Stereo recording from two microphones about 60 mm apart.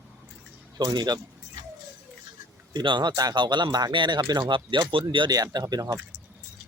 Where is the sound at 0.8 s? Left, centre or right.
Right.